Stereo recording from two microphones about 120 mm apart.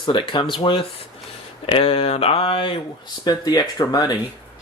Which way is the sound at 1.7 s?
50° left (ahead or behind).